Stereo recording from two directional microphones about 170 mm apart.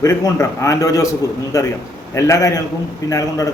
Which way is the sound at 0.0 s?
20° left (ahead or behind).